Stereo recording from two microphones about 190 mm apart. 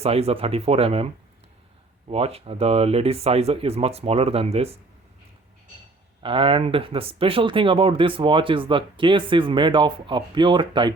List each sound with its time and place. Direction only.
0.0 s speech: 30° right (ahead or behind)
6.2 s speech: 25° right (ahead or behind)